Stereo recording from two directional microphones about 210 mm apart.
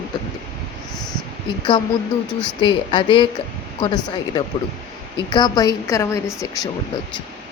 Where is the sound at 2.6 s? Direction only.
20° left (ahead or behind).